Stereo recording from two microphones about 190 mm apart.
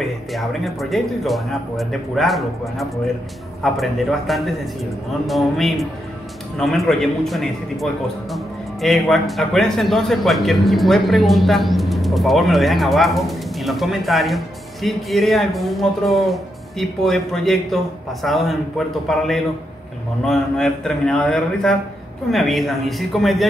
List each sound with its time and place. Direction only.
0.3 s a man's voice: centre (ahead or behind)